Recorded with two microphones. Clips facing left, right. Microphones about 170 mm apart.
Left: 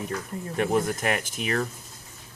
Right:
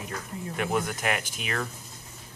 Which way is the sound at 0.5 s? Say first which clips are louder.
Left 4 dB; 40° left (ahead or behind).